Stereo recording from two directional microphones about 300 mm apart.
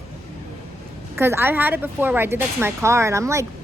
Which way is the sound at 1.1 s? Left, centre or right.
Centre.